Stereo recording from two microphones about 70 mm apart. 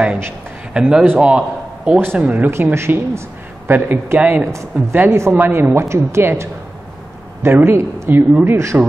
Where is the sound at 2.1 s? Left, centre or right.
Centre.